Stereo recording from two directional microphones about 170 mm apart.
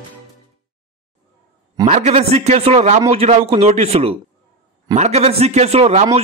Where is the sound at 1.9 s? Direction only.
40° right (ahead or behind).